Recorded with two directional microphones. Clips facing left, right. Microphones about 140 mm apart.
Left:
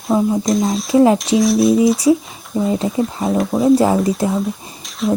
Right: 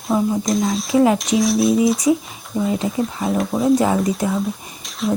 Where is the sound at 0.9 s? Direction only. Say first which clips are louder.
Left 3 dB; 25° left (ahead or behind).